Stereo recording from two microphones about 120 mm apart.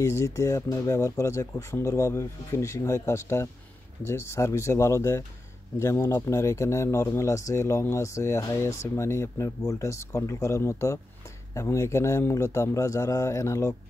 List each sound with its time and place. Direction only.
0.0 s speech: 25° left (ahead or behind)